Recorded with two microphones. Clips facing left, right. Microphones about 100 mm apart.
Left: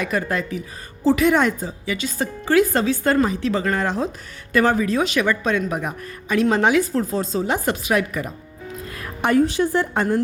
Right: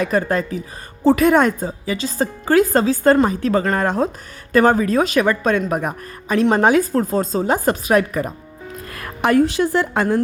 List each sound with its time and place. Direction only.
0.0 s a woman's voice: 35° right (ahead or behind)
8.8 s speech: 60° right (ahead or behind); by 10.2 s 90° right